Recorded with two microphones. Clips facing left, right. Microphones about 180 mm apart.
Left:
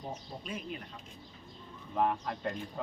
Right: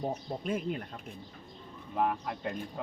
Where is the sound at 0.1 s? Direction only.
55° right (ahead or behind).